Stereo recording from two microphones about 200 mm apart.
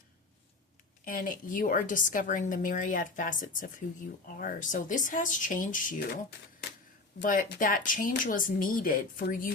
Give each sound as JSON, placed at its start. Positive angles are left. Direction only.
{"t": 1.0, "sound": "a woman's voice", "side_deg": 45}
{"t": 7.2, "sound": "speech", "side_deg": 45}